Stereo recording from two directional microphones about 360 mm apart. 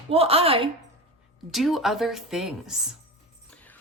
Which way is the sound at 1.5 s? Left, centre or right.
Centre.